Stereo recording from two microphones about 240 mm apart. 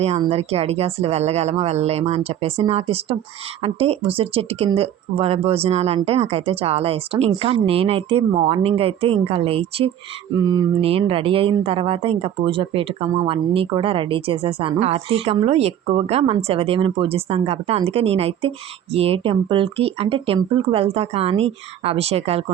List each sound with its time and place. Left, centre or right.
0.0 s speech: right